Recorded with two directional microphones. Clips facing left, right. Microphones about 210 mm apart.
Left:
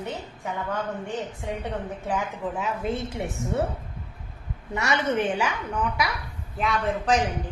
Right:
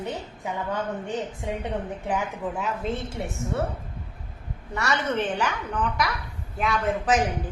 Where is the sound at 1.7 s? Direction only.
15° right (ahead or behind).